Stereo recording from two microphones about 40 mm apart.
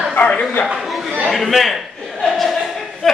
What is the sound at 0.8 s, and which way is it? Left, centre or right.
Chatter, centre.